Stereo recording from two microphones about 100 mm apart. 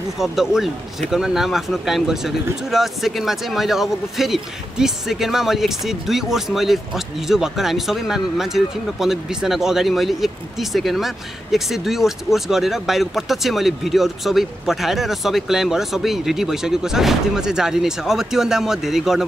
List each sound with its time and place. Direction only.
0.2 s speech: 5° right (ahead or behind)